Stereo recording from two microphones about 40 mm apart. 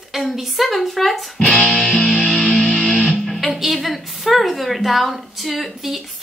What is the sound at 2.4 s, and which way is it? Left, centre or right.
Music, left.